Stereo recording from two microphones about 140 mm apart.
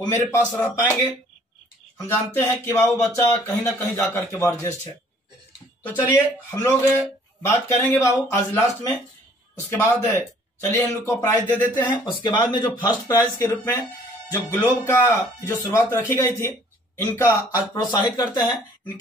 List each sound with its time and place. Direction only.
0.0 s speech: 20° left (ahead or behind)
2.0 s speech: 20° left (ahead or behind)
5.9 s speech: 15° left (ahead or behind)
12.0 s speech: 30° left (ahead or behind)
12.8 s speech: 20° left (ahead or behind)
18.1 s speech: 25° left (ahead or behind)